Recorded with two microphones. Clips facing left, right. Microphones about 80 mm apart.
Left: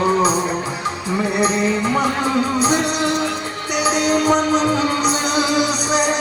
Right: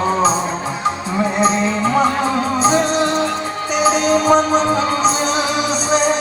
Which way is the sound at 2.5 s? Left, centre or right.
Right.